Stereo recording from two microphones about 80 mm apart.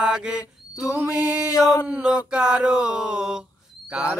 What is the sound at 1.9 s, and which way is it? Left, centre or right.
Mantra, centre.